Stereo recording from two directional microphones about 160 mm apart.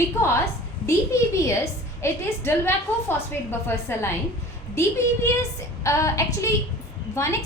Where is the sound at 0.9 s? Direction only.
20° left (ahead or behind).